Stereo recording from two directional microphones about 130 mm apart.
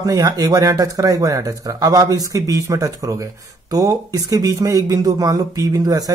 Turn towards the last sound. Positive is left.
turn(degrees=-30)  # may be behind; listen again after turning